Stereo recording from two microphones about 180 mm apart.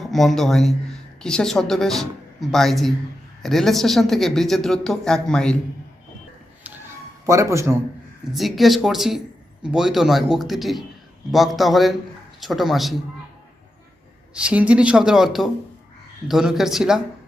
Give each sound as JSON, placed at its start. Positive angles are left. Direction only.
{"t": 0.0, "sound": "speech", "side_deg": 0}
{"t": 7.3, "sound": "a man's voice", "side_deg": -15}
{"t": 8.2, "sound": "speech", "side_deg": 0}
{"t": 14.3, "sound": "speech", "side_deg": -5}